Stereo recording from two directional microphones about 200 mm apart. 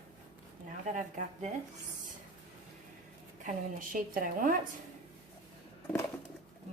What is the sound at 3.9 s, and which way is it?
Speech, 45° right (ahead or behind).